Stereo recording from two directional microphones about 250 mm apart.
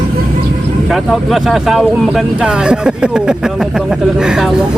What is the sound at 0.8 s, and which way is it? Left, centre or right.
Speech, centre.